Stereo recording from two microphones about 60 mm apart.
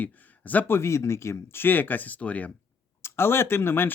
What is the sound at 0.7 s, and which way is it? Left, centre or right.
Speech, left.